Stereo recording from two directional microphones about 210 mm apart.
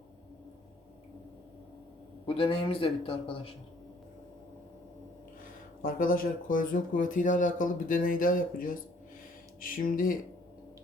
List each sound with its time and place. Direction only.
2.2 s a man's voice: 25° left (ahead or behind)
5.8 s speech: 40° left (ahead or behind)